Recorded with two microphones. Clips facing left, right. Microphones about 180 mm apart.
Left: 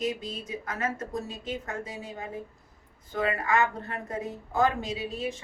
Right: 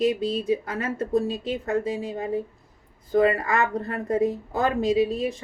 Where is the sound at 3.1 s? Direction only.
35° right (ahead or behind).